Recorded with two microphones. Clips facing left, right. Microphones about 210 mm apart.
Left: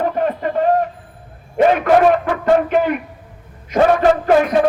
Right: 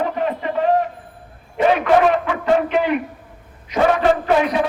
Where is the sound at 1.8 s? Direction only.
45° left (ahead or behind).